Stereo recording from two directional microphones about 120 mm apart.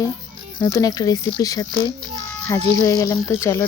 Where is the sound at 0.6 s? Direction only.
30° left (ahead or behind).